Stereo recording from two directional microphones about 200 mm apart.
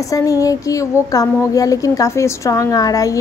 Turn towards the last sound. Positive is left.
turn(degrees=15)  # may be behind; listen again after turning